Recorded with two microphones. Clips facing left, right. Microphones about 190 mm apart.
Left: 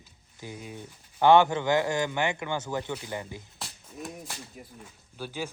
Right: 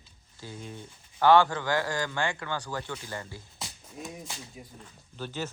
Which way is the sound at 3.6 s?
Centre (ahead or behind).